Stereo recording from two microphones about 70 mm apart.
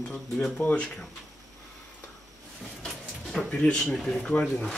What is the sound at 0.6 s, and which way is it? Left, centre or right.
Speech, left.